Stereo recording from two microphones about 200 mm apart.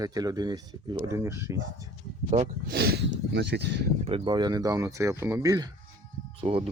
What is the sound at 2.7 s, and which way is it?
Speech, 55° right (ahead or behind).